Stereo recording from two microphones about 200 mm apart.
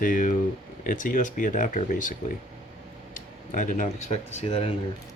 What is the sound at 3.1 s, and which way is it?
Speech, 40° left (ahead or behind).